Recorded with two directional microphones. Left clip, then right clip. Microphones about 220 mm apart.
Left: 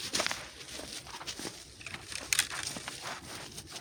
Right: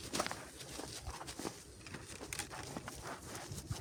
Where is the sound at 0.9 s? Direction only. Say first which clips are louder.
Left 6 dB; 30° left (ahead or behind).